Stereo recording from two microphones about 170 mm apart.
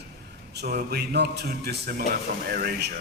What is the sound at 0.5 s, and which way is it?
A man's voice, 65° right (ahead or behind).